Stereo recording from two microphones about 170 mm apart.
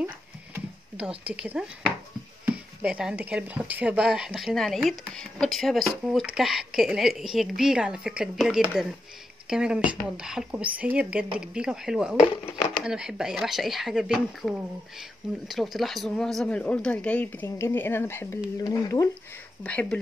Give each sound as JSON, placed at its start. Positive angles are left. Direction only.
{"t": 0.9, "sound": "a woman's voice", "side_deg": -5}
{"t": 19.6, "sound": "speech", "side_deg": 10}